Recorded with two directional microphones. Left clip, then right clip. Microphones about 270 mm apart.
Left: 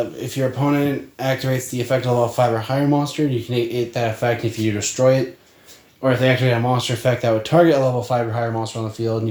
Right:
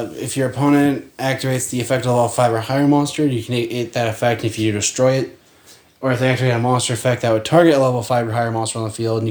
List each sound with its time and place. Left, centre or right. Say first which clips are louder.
0.2 s speech: right 2 dB; right
6.0 s speech: left 1 dB; right